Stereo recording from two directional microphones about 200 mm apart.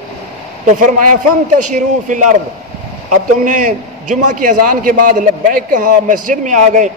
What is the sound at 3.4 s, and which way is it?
A man's voice, 40° right (ahead or behind).